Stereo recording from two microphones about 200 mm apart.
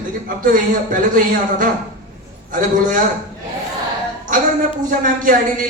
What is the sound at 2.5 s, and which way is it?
Speech, 40° right (ahead or behind).